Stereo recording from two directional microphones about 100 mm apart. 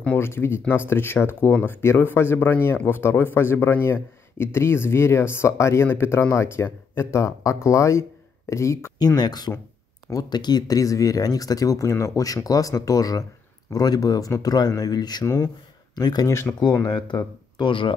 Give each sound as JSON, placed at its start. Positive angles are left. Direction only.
{"t": 0.0, "sound": "speech", "side_deg": 20}
{"t": 8.9, "sound": "speech", "side_deg": 45}
{"t": 15.2, "sound": "speech", "side_deg": 30}
{"t": 15.9, "sound": "speech", "side_deg": 45}
{"t": 16.5, "sound": "speech", "side_deg": 10}
{"t": 16.8, "sound": "speech", "side_deg": 50}